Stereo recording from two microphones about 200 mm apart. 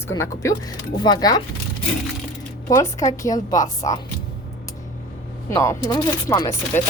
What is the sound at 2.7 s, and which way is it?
A woman's voice, 15° left (ahead or behind).